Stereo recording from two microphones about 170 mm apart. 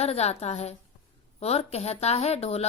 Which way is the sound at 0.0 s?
40° left (ahead or behind).